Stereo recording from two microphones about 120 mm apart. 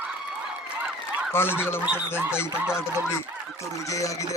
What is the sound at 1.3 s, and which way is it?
Speech, 20° left (ahead or behind).